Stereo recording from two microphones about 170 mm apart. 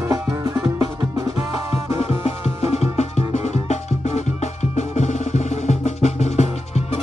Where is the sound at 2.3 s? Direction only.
40° left (ahead or behind).